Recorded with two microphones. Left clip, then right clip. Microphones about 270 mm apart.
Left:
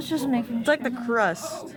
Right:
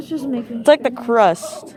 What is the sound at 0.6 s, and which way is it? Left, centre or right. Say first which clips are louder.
Speech: right 11 dB; centre.